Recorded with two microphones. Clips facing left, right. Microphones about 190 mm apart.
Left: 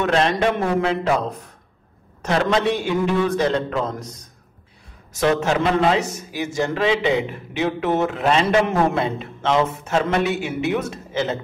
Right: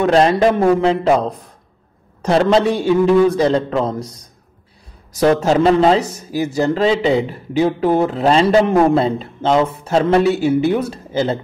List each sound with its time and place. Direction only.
0.0 s a man's voice: 35° right (ahead or behind)